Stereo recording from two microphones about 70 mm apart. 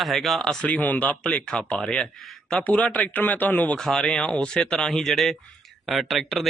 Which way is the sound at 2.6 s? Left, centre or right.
Centre.